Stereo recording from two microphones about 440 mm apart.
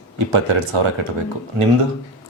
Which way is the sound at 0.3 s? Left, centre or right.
Right.